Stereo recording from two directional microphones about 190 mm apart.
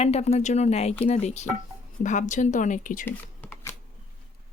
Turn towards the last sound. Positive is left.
turn(degrees=10)  # may be behind; listen again after turning